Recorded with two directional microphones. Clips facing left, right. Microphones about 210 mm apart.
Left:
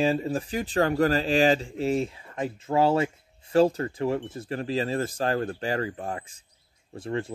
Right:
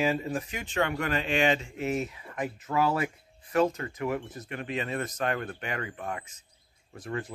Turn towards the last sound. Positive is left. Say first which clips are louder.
# left 5 dB
turn(degrees=25)  # may be behind; listen again after turning